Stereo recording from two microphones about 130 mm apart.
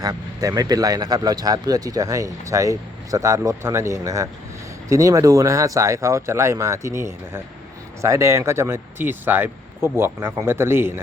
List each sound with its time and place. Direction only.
0.0 s speech: 30° right (ahead or behind)